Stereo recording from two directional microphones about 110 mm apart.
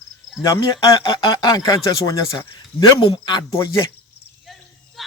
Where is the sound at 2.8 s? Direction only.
50° left (ahead or behind).